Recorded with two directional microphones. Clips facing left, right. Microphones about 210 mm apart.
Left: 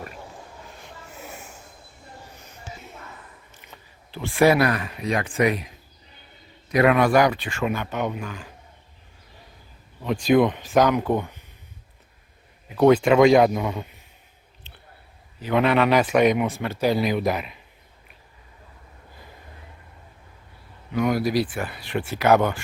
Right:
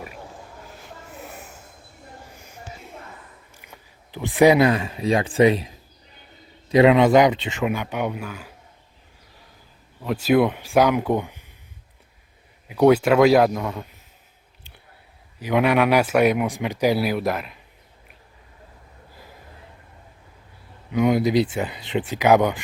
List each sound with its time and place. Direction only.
0.7 s snort: centre (ahead or behind)
3.5 s speech: 10° right (ahead or behind)
10.0 s speech: 5° right (ahead or behind)
12.6 s a man's voice: 10° right (ahead or behind)
15.4 s speech: 10° right (ahead or behind)
20.9 s speech: 20° right (ahead or behind)